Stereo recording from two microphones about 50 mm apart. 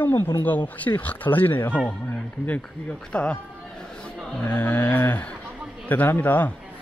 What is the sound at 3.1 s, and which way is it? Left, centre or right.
Speech, left.